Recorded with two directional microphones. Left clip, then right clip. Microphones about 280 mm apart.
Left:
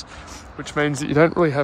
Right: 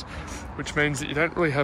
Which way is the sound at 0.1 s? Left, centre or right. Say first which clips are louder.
Right 1 dB; centre.